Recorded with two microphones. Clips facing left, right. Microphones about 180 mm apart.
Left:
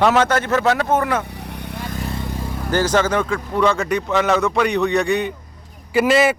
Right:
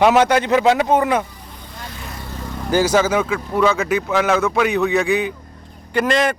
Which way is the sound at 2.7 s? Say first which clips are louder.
Right 2 dB; 10° right (ahead or behind).